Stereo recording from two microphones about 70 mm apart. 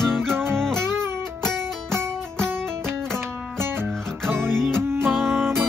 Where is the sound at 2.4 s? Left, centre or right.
Right.